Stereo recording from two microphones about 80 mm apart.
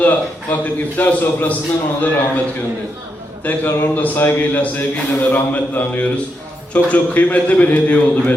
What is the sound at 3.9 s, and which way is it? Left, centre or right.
A man's voice, left.